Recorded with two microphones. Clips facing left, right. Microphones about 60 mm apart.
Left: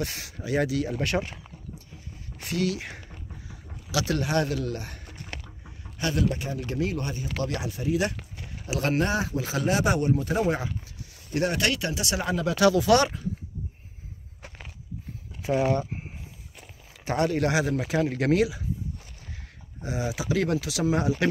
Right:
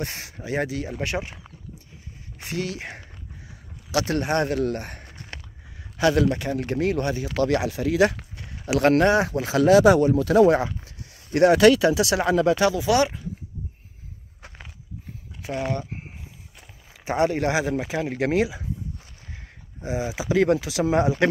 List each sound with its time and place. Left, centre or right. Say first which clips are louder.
0.0 s speech: even; right; by 1.3 s centre
2.3 s speech: left 2 dB; right
5.9 s a man's voice: right 7 dB; right
6.6 s speech: right 6 dB; right
8.6 s speech: right 8 dB; right
10.1 s speech: right 9 dB; right
12.4 s speech: left 3 dB; right
12.7 s speech: even; centre
15.4 s speech: left 4 dB; centre
17.0 s speech: right 3 dB; centre
19.3 s a sound: right 1 dB; right
20.8 s speech: right 3 dB; right